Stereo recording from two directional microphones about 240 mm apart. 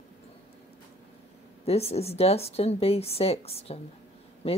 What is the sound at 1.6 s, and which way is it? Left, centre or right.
Speech, left.